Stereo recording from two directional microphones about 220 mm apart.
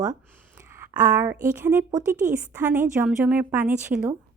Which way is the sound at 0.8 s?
10° right (ahead or behind).